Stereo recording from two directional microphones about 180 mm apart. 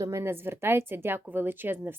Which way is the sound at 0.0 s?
15° right (ahead or behind).